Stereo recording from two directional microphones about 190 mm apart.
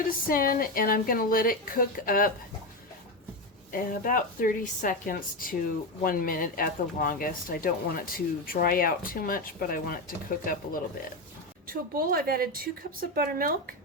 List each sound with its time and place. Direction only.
0.3 s speech: 50° left (ahead or behind)
3.7 s speech: 45° left (ahead or behind)
11.7 s speech: 50° right (ahead or behind)